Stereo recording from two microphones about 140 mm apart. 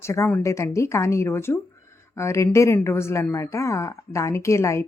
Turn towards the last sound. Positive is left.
turn(degrees=20)  # may be behind; listen again after turning